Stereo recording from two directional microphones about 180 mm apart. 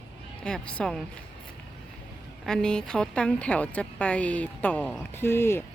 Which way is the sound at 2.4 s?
5° left (ahead or behind).